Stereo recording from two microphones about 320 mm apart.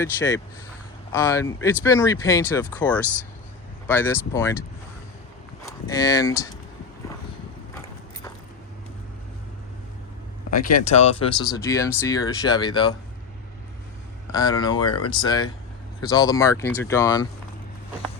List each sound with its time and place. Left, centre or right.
0.0 s speech: centre
5.6 s speech: centre
10.7 s speech: left
14.3 s speech: centre
14.8 s speech: left
15.1 s speech: centre